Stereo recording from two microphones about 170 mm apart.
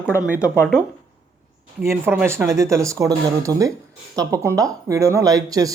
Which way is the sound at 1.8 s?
15° right (ahead or behind).